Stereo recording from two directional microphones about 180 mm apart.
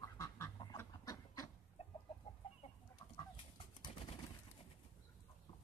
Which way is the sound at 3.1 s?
25° left (ahead or behind).